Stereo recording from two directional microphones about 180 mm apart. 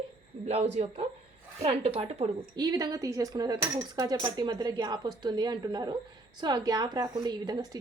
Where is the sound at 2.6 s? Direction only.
20° right (ahead or behind).